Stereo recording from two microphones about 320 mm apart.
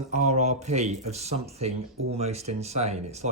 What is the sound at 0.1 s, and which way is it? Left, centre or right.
Speech, right.